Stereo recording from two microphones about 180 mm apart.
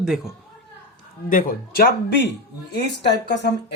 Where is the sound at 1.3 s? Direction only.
50° left (ahead or behind).